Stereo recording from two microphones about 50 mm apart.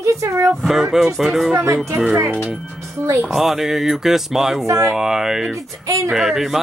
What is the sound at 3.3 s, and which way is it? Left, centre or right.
Speech, centre.